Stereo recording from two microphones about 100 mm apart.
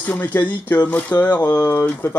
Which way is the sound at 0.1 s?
15° left (ahead or behind).